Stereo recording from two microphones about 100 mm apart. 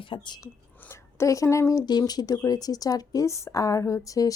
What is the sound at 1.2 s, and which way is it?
Speech, 30° left (ahead or behind).